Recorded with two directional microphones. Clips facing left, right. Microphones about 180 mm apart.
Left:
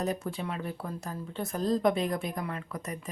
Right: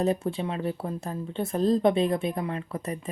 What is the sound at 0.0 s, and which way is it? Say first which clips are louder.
Speech: right 6 dB; 25° right (ahead or behind).